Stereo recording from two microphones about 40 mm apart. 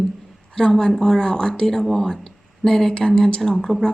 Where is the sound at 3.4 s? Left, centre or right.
Centre.